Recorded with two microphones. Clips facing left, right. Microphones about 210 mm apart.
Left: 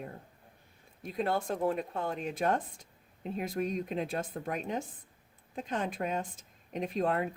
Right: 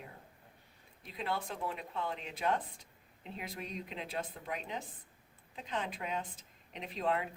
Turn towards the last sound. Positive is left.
turn(degrees=45)  # may be behind; listen again after turning